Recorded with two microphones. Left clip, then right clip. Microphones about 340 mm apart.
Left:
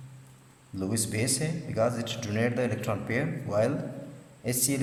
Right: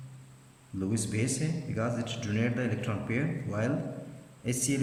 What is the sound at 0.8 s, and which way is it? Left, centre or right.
A man's voice, centre.